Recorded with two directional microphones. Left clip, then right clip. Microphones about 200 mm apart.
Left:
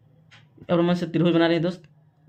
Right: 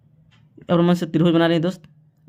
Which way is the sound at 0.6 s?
45° right (ahead or behind).